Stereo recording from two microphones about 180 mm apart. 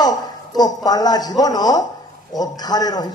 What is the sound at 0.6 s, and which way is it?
A man's voice, 20° left (ahead or behind).